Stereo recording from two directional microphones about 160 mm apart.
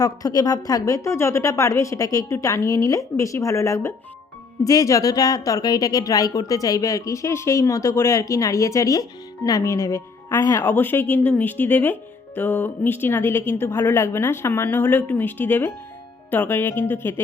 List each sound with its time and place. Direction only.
0.0 s a woman's voice: 25° left (ahead or behind)